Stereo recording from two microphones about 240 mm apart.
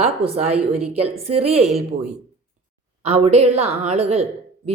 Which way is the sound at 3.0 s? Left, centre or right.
Right.